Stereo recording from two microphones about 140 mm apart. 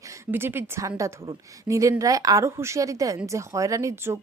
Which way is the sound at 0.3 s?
15° right (ahead or behind).